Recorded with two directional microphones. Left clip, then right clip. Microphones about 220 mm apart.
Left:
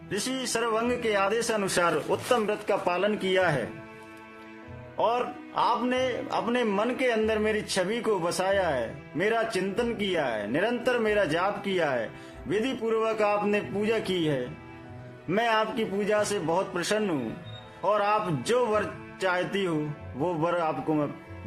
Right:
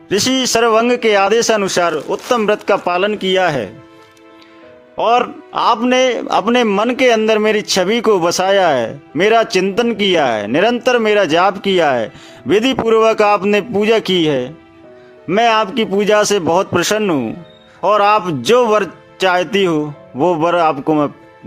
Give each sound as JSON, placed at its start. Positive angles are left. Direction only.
{"t": 0.1, "sound": "speech", "side_deg": -45}
{"t": 4.9, "sound": "speech", "side_deg": -45}